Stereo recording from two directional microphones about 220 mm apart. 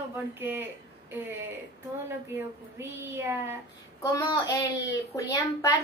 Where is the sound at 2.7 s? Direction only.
10° right (ahead or behind).